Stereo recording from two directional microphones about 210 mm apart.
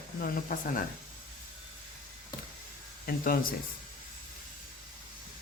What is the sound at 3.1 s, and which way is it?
Speech, 45° left (ahead or behind).